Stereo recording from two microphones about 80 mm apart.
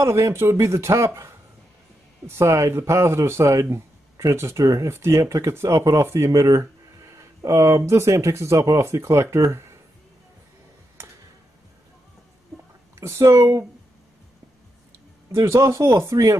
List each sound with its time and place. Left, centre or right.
0.0 s speech: right
12.9 s speech: right
15.3 s speech: right